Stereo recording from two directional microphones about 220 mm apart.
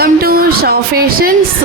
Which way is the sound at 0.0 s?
45° right (ahead or behind).